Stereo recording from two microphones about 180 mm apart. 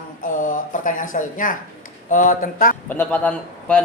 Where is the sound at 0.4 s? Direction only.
45° left (ahead or behind).